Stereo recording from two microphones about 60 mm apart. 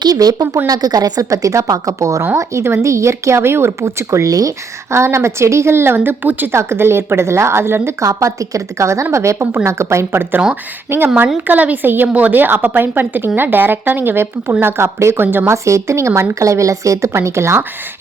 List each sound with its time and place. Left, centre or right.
0.1 s a woman's voice: right
2.3 s a woman's voice: right
4.3 s speech: right
4.9 s a woman's voice: right
6.5 s a woman's voice: right
8.0 s a woman's voice: right
10.1 s a woman's voice: right
11.4 s a woman's voice: right
15.4 s a woman's voice: right